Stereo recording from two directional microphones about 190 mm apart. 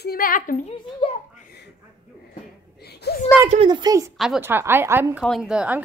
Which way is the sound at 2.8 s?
60° left (ahead or behind).